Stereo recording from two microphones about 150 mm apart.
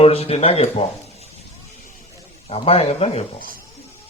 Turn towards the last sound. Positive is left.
turn(degrees=45)  # may be behind; listen again after turning